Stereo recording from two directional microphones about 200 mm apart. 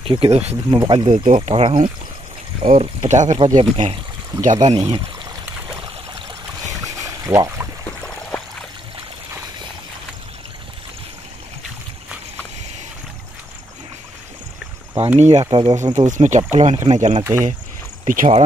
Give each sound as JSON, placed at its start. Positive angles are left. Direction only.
{"t": 0.0, "sound": "speech", "side_deg": -25}
{"t": 4.7, "sound": "speech", "side_deg": -20}
{"t": 6.7, "sound": "boat", "side_deg": -15}
{"t": 7.8, "sound": "a sound", "side_deg": 5}
{"t": 15.1, "sound": "speech", "side_deg": -35}
{"t": 16.1, "sound": "speech", "side_deg": -35}
{"t": 17.2, "sound": "speech", "side_deg": -10}
{"t": 18.0, "sound": "speech", "side_deg": -40}